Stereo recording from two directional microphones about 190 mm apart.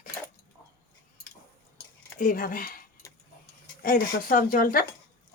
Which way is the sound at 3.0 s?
15° left (ahead or behind).